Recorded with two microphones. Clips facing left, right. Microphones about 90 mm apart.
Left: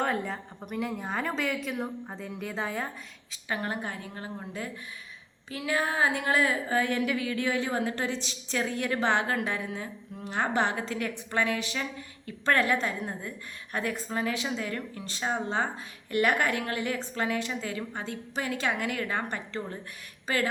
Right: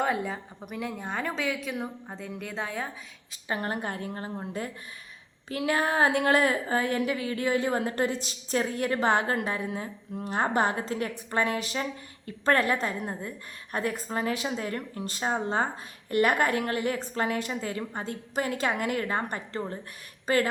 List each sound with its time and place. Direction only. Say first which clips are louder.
0.0 s a woman's voice: right 1 dB; 5° right (ahead or behind)
3.5 s a woman's voice: right 2 dB; 40° right (ahead or behind)
5.5 s a woman's voice: right 3 dB; 50° right (ahead or behind)
14.1 s a woman's voice: right 1 dB; 40° right (ahead or behind)
20.2 s speech: right 4 dB; 45° right (ahead or behind)